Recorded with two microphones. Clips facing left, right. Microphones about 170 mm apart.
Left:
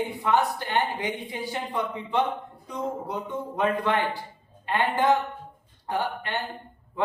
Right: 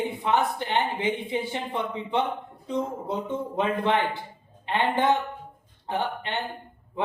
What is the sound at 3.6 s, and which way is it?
A woman's voice, 20° right (ahead or behind).